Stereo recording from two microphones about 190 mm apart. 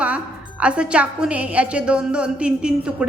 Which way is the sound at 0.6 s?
5° right (ahead or behind).